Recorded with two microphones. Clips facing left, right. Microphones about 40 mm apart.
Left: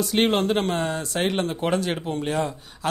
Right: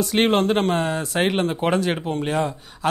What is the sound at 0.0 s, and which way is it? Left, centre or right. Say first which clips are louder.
Speech: right 2 dB; centre.